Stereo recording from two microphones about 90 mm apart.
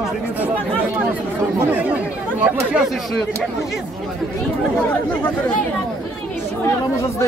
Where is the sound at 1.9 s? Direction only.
15° right (ahead or behind).